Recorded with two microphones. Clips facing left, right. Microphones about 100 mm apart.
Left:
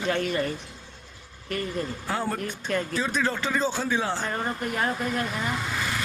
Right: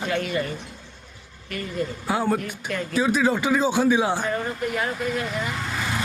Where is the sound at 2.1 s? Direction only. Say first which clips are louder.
Right 6 dB; 10° right (ahead or behind).